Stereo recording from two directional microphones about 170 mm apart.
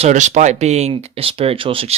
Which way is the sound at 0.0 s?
45° right (ahead or behind).